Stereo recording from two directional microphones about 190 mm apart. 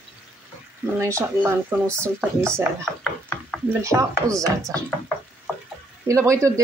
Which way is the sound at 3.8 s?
15° right (ahead or behind).